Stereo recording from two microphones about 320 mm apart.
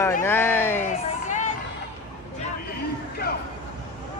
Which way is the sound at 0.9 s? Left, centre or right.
Left.